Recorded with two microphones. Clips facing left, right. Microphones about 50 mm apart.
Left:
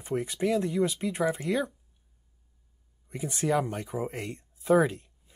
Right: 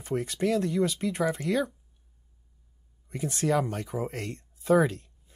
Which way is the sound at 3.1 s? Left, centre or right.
Centre.